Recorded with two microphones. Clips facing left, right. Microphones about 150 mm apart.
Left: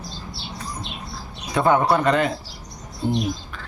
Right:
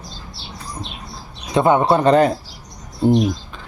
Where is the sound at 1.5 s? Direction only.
20° right (ahead or behind).